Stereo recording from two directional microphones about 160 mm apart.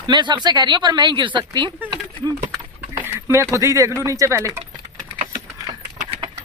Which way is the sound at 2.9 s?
15° right (ahead or behind).